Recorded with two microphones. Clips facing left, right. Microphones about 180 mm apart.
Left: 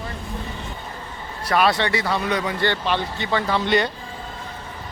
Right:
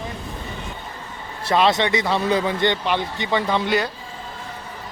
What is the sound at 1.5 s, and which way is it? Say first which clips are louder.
A man's voice: right 1 dB; 25° right (ahead or behind).